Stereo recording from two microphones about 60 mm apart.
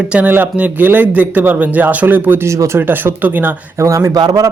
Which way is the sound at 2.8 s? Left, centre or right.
Right.